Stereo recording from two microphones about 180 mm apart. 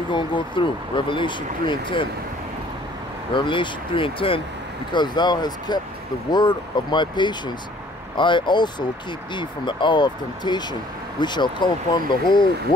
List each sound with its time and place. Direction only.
0.1 s speech: 25° left (ahead or behind)
3.3 s speech: 30° left (ahead or behind)